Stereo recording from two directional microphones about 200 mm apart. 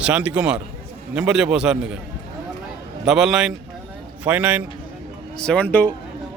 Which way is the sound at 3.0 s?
5° right (ahead or behind).